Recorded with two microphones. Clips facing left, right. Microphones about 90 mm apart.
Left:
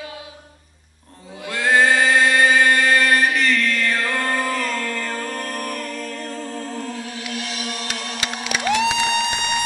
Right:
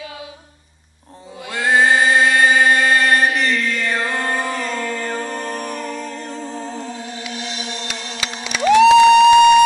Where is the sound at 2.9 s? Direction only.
25° right (ahead or behind).